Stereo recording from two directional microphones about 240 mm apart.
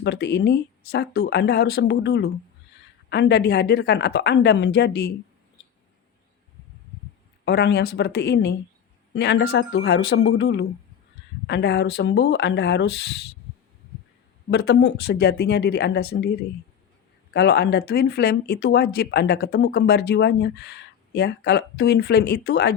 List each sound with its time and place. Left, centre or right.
0.0 s speech: left
7.4 s speech: left
14.5 s speech: left